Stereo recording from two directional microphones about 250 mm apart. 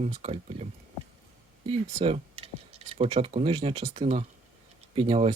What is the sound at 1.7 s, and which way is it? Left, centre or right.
Speech, right.